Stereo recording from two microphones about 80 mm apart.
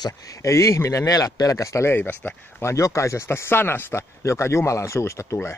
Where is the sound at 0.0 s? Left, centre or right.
Left.